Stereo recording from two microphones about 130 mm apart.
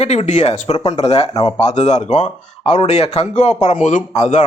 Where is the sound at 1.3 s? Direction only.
35° left (ahead or behind).